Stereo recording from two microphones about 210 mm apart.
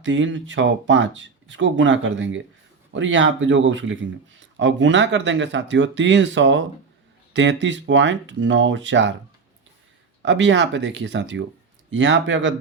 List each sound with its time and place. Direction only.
0.0 s speech: 60° right (ahead or behind)
10.2 s speech: 60° right (ahead or behind)